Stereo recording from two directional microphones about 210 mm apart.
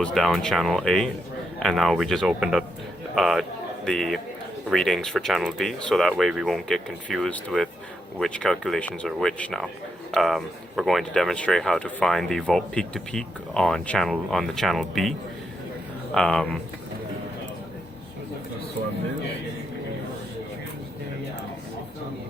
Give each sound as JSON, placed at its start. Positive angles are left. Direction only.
{"t": 0.0, "sound": "speech", "side_deg": 0}
{"t": 16.1, "sound": "speech", "side_deg": 5}